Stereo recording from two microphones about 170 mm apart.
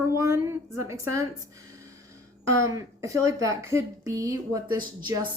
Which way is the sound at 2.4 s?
20° right (ahead or behind).